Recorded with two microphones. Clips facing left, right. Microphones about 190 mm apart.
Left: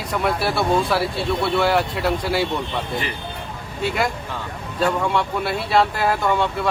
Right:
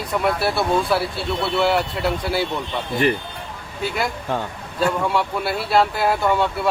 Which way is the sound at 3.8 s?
Centre (ahead or behind).